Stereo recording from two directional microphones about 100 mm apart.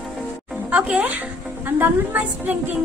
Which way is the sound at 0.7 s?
15° right (ahead or behind).